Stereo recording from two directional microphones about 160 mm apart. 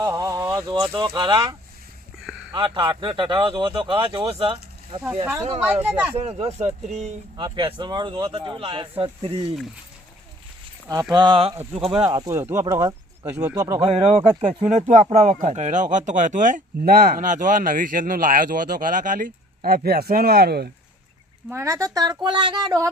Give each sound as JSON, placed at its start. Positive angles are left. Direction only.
{"t": 0.0, "sound": "speech", "side_deg": -20}
{"t": 2.1, "sound": "a sound", "side_deg": -5}
{"t": 2.5, "sound": "a man's voice", "side_deg": -30}
{"t": 5.6, "sound": "speech", "side_deg": -10}
{"t": 6.1, "sound": "speech", "side_deg": -40}
{"t": 7.3, "sound": "speech", "side_deg": -30}
{"t": 11.1, "sound": "a man's voice", "side_deg": -30}
{"t": 13.8, "sound": "speech", "side_deg": -40}
{"t": 21.5, "sound": "a man's voice", "side_deg": -20}